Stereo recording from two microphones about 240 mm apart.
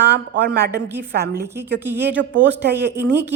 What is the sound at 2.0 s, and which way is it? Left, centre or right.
Speech, right.